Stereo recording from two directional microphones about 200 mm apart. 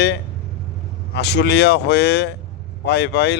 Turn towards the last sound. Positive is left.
turn(degrees=60)  # may be behind; listen again after turning